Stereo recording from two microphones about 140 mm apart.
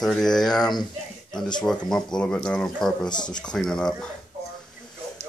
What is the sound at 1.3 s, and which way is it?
Speech, 30° left (ahead or behind).